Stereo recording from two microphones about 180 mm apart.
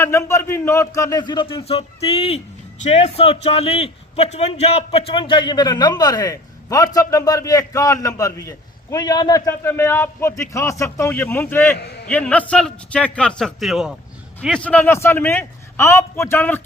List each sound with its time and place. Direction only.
0.0 s a man's voice: 15° left (ahead or behind)